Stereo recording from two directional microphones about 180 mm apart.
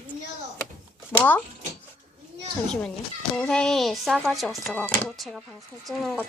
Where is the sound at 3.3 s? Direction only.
5° left (ahead or behind).